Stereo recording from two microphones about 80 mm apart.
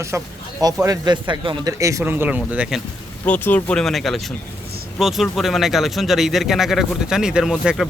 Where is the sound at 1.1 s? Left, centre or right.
Right.